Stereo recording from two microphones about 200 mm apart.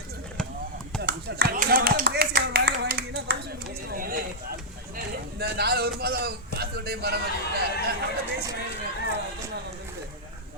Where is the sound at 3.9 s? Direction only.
45° right (ahead or behind).